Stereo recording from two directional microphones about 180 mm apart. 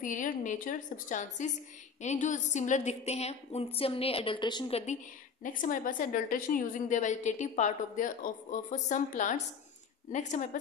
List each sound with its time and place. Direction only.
0.0 s a woman's voice: 45° left (ahead or behind)
5.4 s a woman's voice: 45° left (ahead or behind)